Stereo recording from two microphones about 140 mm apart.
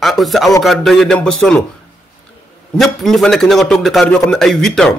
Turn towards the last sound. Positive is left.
turn(degrees=5)  # may be behind; listen again after turning